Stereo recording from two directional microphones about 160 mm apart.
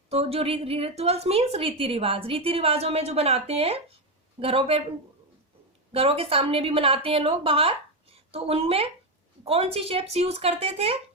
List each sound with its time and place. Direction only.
0.1 s a woman's voice: 40° right (ahead or behind)
5.9 s a woman's voice: 35° right (ahead or behind)